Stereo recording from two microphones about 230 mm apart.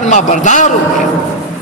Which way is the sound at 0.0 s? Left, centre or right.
Left.